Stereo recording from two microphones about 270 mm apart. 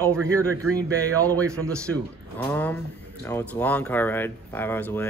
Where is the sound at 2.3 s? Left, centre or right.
Centre.